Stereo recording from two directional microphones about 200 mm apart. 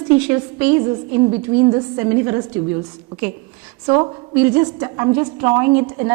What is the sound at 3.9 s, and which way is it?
A woman's voice, 20° right (ahead or behind).